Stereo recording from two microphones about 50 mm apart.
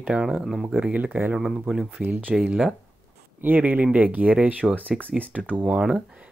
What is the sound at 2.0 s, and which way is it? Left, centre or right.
Speech, right.